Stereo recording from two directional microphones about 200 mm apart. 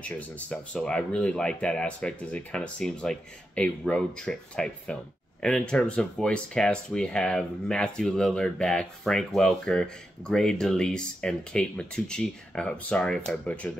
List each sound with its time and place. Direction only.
0.0 s speech: 5° left (ahead or behind)